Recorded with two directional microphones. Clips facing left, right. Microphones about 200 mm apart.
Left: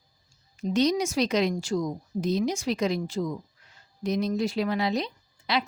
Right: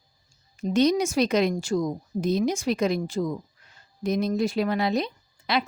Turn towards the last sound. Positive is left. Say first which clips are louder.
# right 2 dB
turn(degrees=-55)  # may be behind; listen again after turning